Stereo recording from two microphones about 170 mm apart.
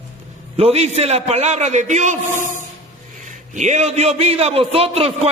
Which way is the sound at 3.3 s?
45° right (ahead or behind).